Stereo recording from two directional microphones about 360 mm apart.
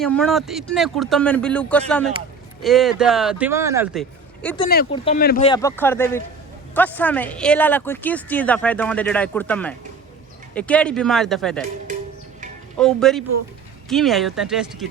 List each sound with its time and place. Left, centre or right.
0.0 s speech: centre
4.7 s speech: centre
5.5 s speech: centre
12.8 s speech: centre